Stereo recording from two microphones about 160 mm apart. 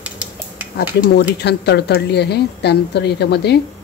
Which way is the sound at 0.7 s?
85° left.